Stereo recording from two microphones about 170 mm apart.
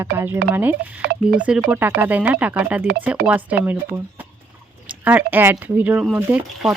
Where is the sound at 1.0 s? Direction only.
70° right (ahead or behind).